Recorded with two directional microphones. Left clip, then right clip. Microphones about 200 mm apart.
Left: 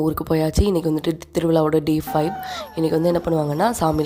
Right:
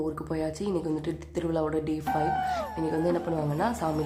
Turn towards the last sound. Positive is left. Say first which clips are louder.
# left 9 dB
turn(degrees=40)  # may be behind; listen again after turning